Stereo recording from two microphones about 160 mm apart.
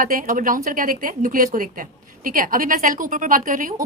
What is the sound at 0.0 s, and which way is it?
A woman's voice, 60° right (ahead or behind).